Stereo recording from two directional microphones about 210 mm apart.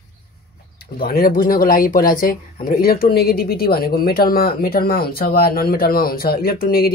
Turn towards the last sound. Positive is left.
turn(degrees=45)  # may be behind; listen again after turning